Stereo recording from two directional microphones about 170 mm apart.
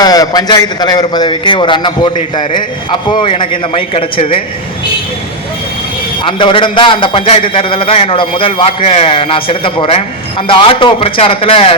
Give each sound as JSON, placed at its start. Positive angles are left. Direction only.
{"t": 0.0, "sound": "a man's voice", "side_deg": 20}
{"t": 6.2, "sound": "a man's voice", "side_deg": 30}